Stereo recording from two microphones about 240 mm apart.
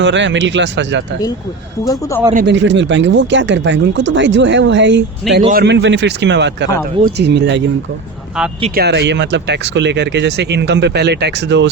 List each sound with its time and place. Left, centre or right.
0.0 s speech: right
1.8 s speech: centre
2.3 s speech: right
8.4 s speech: centre
8.7 s speech: right